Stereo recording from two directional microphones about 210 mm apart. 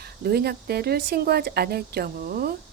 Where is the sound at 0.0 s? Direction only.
50° right (ahead or behind).